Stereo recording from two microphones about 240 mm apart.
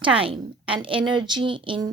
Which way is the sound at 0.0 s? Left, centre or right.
Right.